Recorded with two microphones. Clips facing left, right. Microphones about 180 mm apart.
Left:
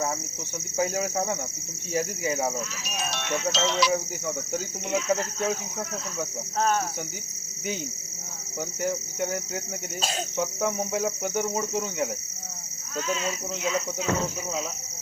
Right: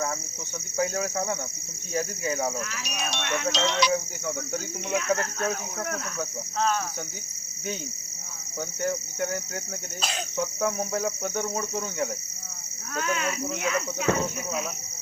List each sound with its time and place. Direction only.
0.8 s cricket: 20° left (ahead or behind)
2.6 s speech: 70° right (ahead or behind)
3.5 s speech: 5° left (ahead or behind)
4.9 s speech: 65° right (ahead or behind)
6.6 s cricket: 50° left (ahead or behind)
8.8 s cricket: 5° left (ahead or behind)
10.3 s cricket: 20° left (ahead or behind)
10.8 s speech: 5° left (ahead or behind)
11.2 s cricket: 15° left (ahead or behind)
13.0 s speech: 65° right (ahead or behind)